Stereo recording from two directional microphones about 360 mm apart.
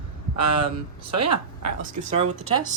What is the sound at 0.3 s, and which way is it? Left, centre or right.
A woman's voice, right.